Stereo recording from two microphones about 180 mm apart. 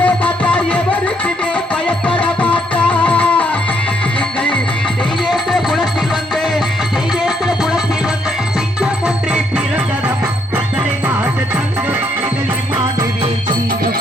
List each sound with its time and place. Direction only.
0.0 s music: 5° left (ahead or behind)
2.0 s music: 5° left (ahead or behind)
5.3 s music: centre (ahead or behind)
7.3 s music: centre (ahead or behind)
8.8 s music: 5° right (ahead or behind)